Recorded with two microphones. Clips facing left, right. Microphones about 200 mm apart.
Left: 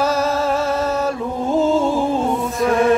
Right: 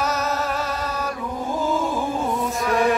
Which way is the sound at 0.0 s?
30° left (ahead or behind).